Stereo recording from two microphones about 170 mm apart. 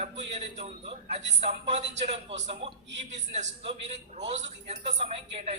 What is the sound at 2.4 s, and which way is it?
A woman's voice, 35° right (ahead or behind).